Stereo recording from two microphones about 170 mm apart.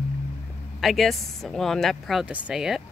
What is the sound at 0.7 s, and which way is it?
Speech, centre (ahead or behind).